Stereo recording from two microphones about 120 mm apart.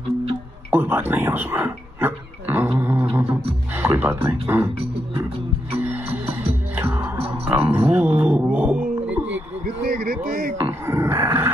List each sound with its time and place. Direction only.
0.7 s speech: 15° right (ahead or behind)
2.8 s beatboxing: 15° right (ahead or behind)
3.2 s music: 15° right (ahead or behind)
3.7 s speech: 15° right (ahead or behind)
5.8 s music: 15° right (ahead or behind)
7.4 s speech: 15° right (ahead or behind)
10.6 s a sound: 20° right (ahead or behind)